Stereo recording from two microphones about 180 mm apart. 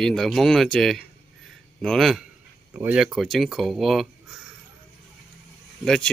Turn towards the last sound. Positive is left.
turn(degrees=5)  # may be behind; listen again after turning